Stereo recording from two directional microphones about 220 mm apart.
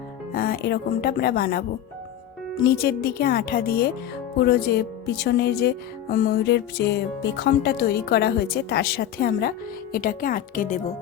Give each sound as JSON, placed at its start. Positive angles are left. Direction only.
{"t": 0.3, "sound": "speech", "side_deg": 45}
{"t": 2.6, "sound": "speech", "side_deg": 45}